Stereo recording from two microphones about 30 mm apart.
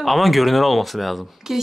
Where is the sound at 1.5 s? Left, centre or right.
Centre.